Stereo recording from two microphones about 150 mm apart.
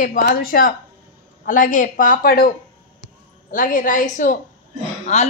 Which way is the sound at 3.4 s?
65° left (ahead or behind).